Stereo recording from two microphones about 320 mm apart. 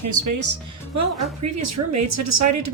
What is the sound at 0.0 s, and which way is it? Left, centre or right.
A woman's voice, right.